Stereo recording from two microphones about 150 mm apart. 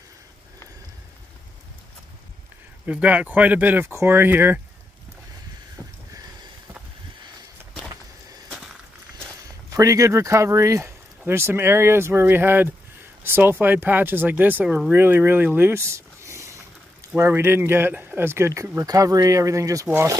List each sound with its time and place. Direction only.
2.9 s speech: 10° right (ahead or behind)
9.7 s speech: 20° right (ahead or behind)